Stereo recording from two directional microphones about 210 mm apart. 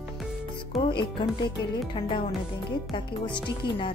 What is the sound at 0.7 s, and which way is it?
Speech, 25° left (ahead or behind).